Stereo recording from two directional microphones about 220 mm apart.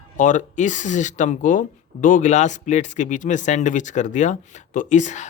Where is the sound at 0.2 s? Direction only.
35° left (ahead or behind).